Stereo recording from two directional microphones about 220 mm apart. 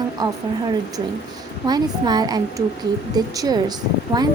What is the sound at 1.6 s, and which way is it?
Speech, 20° right (ahead or behind).